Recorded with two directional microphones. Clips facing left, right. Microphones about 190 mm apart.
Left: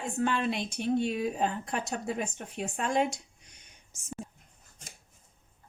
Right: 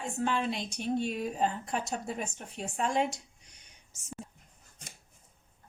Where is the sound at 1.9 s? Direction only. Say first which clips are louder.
Left 3 dB; 60° left (ahead or behind).